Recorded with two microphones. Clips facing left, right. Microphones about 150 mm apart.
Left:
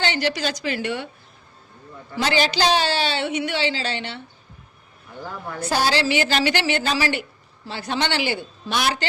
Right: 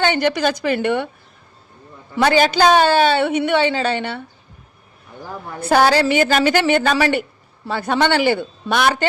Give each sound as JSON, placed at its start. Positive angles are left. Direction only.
{"t": 0.0, "sound": "a woman's voice", "side_deg": -55}
{"t": 2.1, "sound": "a woman's voice", "side_deg": -55}
{"t": 5.6, "sound": "a woman's voice", "side_deg": -55}